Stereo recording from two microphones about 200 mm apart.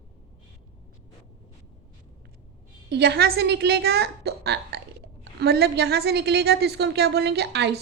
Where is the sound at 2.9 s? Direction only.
55° right (ahead or behind).